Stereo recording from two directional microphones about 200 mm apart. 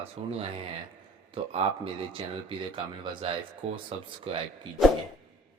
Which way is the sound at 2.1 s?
25° right (ahead or behind).